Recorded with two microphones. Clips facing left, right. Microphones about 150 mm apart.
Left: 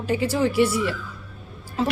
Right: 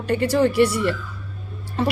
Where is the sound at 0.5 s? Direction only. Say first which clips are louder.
Right 2 dB; 65° right (ahead or behind).